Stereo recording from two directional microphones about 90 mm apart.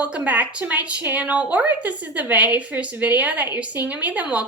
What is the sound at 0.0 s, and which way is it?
A woman's voice, 15° right (ahead or behind).